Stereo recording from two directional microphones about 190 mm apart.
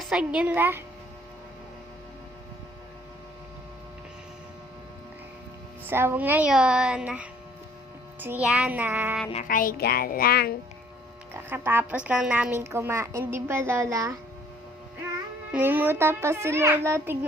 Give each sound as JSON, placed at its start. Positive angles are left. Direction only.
{"t": 0.0, "sound": "a woman's voice", "side_deg": -5}
{"t": 5.9, "sound": "a woman's voice", "side_deg": -10}
{"t": 9.3, "sound": "a woman's voice", "side_deg": 45}
{"t": 11.4, "sound": "a woman's voice", "side_deg": -10}
{"t": 15.5, "sound": "a woman's voice", "side_deg": -10}